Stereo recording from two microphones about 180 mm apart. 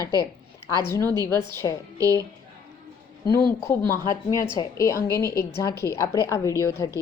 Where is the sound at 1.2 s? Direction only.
15° left (ahead or behind).